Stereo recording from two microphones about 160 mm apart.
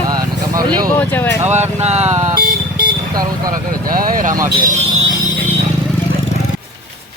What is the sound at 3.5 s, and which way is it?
Speech, 60° right (ahead or behind).